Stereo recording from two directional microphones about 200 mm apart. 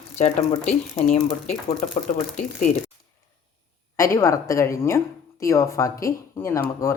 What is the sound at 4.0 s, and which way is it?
Speech, 15° left (ahead or behind).